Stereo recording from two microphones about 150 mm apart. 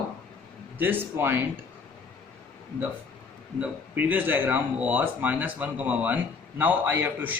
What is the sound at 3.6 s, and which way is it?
Speech, 10° right (ahead or behind).